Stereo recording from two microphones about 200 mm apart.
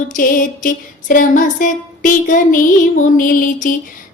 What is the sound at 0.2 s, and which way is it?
Music, 45° left (ahead or behind).